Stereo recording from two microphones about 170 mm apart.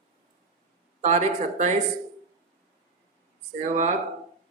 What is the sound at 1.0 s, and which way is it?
Speech, 45° right (ahead or behind).